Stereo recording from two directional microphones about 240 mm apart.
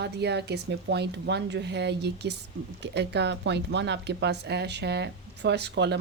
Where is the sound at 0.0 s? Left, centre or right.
Right.